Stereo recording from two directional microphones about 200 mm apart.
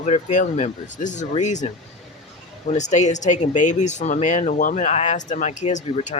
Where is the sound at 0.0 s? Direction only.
40° left (ahead or behind).